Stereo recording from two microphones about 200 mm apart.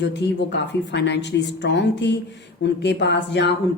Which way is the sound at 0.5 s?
60° left (ahead or behind).